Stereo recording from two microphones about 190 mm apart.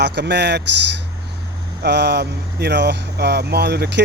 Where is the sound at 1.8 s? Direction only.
60° right (ahead or behind).